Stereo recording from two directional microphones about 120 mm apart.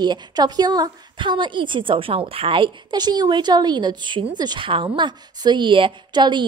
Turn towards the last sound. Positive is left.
turn(degrees=-40)  # may be behind; listen again after turning